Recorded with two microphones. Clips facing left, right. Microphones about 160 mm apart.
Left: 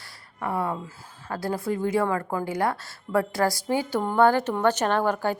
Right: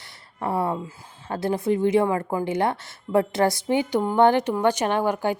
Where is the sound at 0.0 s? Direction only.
30° right (ahead or behind).